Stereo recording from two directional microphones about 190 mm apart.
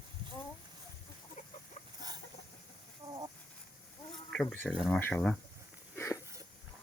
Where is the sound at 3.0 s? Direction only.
15° right (ahead or behind).